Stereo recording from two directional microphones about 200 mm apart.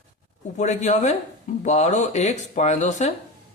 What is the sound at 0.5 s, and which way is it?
Speech, 35° left (ahead or behind).